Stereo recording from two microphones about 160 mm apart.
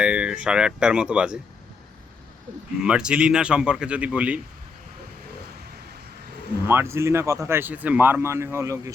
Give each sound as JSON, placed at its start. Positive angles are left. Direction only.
{"t": 0.0, "sound": "speech", "side_deg": -5}
{"t": 2.8, "sound": "a man's voice", "side_deg": -5}
{"t": 6.7, "sound": "speech", "side_deg": -15}